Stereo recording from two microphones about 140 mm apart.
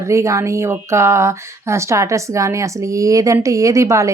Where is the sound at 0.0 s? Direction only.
20° right (ahead or behind).